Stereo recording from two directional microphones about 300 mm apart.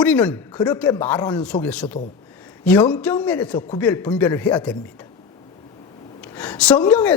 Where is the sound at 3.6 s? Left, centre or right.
Centre.